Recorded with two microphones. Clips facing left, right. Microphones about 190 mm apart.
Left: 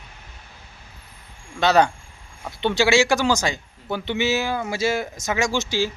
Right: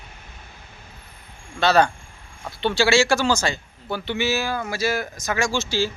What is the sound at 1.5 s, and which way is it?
A man's voice, 20° left (ahead or behind).